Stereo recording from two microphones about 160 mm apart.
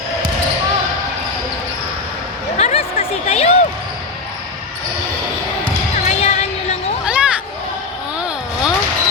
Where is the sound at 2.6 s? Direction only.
40° left (ahead or behind).